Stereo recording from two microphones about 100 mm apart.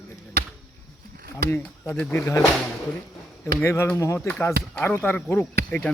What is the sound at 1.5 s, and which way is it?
Speech, 25° left (ahead or behind).